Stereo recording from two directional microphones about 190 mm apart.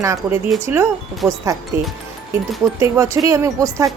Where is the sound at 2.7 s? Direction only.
15° right (ahead or behind).